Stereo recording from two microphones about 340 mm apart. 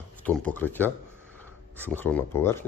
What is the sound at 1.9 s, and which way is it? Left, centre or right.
Speech, centre.